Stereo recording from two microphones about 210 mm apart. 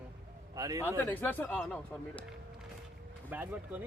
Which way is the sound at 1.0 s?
10° left (ahead or behind).